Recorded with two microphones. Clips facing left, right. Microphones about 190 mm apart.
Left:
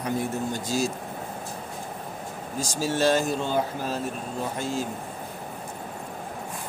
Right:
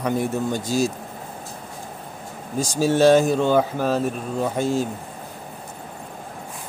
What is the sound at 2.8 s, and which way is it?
A man's voice, 60° right (ahead or behind).